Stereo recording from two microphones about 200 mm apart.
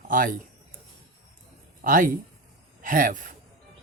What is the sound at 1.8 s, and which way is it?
A man's voice, 45° right (ahead or behind).